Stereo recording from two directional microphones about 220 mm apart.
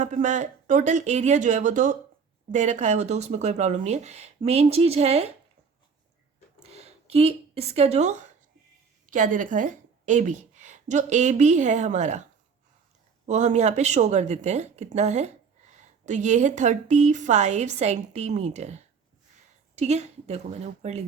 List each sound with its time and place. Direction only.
0.0 s a woman's voice: 35° right (ahead or behind)
6.6 s a sound: 30° right (ahead or behind)
9.0 s a woman's voice: 35° right (ahead or behind)
13.2 s a woman's voice: 30° right (ahead or behind)